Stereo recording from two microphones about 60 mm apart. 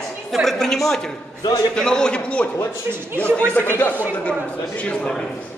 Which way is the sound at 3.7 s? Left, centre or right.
Left.